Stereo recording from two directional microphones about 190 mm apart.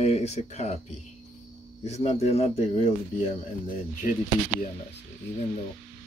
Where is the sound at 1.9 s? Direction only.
35° left (ahead or behind).